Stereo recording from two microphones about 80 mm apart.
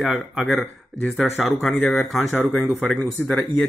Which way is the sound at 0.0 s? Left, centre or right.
Centre.